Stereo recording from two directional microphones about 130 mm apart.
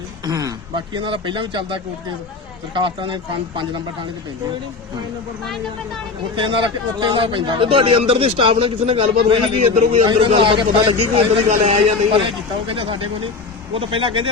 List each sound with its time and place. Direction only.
0.3 s a sound: 30° right (ahead or behind)
0.9 s a man's voice: 40° right (ahead or behind)
6.3 s a man's voice: 40° right (ahead or behind)
10.1 s a man's voice: 40° right (ahead or behind)
11.4 s a man's voice: 60° right (ahead or behind)
12.6 s a man's voice: 40° right (ahead or behind)